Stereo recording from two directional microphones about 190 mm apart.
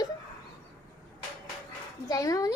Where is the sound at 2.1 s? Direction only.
20° left (ahead or behind).